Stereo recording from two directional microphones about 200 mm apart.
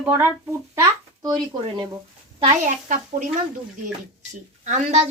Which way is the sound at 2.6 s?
40° right (ahead or behind).